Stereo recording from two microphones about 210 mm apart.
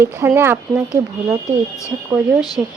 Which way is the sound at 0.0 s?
10° right (ahead or behind).